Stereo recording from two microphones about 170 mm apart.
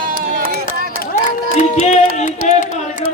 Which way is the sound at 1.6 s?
45° left (ahead or behind).